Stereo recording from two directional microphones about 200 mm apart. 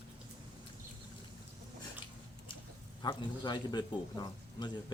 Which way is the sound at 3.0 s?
25° left (ahead or behind).